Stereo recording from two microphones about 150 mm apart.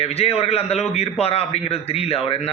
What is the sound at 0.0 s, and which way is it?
A man's voice, 40° left (ahead or behind).